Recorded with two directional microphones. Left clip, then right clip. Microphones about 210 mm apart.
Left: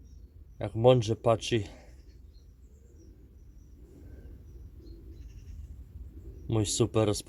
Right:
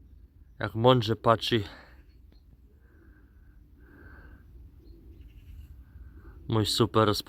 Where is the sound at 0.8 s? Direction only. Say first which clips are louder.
Right 1 dB; 15° right (ahead or behind).